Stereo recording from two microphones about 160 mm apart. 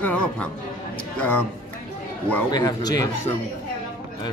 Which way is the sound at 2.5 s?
25° left (ahead or behind).